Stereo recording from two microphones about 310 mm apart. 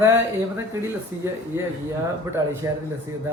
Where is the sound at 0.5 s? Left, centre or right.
Centre.